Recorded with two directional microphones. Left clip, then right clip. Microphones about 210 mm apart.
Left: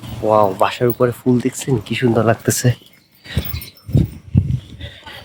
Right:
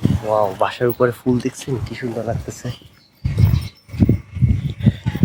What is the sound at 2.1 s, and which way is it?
Speech, 40° left (ahead or behind).